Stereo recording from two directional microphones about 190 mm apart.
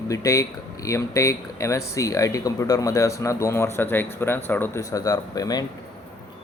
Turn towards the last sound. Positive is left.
turn(degrees=20)  # may be behind; listen again after turning